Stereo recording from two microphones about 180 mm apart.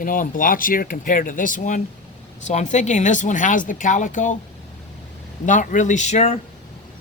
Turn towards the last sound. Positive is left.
turn(degrees=40)  # may be behind; listen again after turning